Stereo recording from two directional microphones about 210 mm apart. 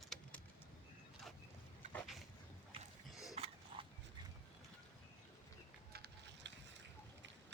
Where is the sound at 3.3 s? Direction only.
25° right (ahead or behind).